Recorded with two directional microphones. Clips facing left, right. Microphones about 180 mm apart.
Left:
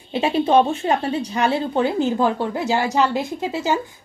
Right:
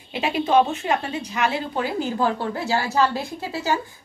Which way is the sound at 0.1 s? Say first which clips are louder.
Left 3 dB; 30° left (ahead or behind).